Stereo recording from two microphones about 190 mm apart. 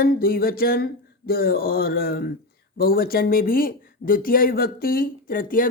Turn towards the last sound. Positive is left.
turn(degrees=45)  # may be behind; listen again after turning